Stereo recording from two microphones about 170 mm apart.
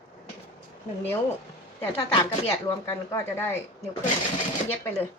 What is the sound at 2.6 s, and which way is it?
Speech, 15° left (ahead or behind).